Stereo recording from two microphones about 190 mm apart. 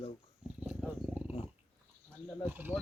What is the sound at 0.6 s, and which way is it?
Wild animals, 5° right (ahead or behind).